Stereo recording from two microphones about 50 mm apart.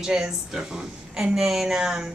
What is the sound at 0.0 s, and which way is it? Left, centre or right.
A woman's voice, centre.